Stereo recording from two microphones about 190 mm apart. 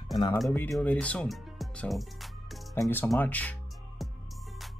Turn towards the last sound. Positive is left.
turn(degrees=5)  # may be behind; listen again after turning